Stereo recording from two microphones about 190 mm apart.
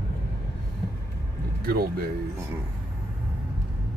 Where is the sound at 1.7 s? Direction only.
55° right (ahead or behind).